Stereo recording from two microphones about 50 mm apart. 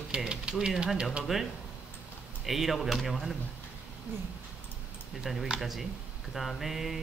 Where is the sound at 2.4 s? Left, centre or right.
Centre.